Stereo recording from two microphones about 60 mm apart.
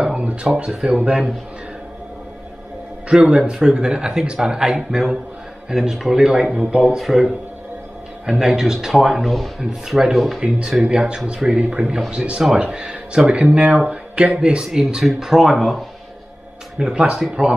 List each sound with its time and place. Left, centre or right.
0.0 s a sound: centre
0.6 s speech: centre
3.1 s speech: centre
8.3 s speech: centre
10.8 s speech: centre